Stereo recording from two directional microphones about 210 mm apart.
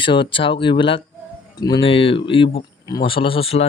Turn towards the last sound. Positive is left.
turn(degrees=30)  # may be behind; listen again after turning